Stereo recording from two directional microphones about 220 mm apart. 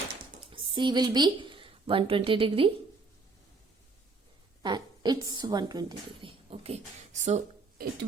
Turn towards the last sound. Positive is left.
turn(degrees=-30)  # may be behind; listen again after turning